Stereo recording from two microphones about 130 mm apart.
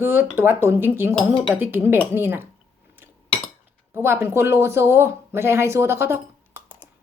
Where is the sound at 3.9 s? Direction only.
15° right (ahead or behind).